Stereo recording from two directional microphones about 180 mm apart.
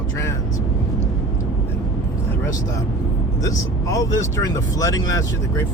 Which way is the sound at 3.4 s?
20° left (ahead or behind).